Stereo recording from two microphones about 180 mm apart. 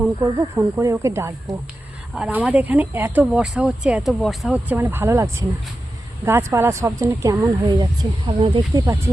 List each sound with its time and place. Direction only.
0.2 s speech: 15° right (ahead or behind)
2.1 s speech: 5° right (ahead or behind); by 8.8 s 30° right (ahead or behind)